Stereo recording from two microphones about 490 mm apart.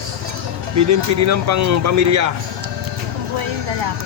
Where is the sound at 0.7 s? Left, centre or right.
Right.